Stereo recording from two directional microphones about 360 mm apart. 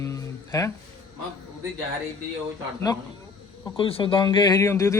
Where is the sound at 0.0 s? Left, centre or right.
Centre.